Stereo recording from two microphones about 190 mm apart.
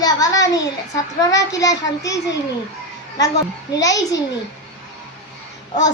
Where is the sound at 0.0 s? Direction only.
20° left (ahead or behind).